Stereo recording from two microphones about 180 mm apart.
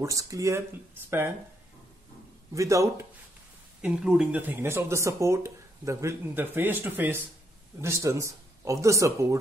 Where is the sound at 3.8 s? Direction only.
5° right (ahead or behind).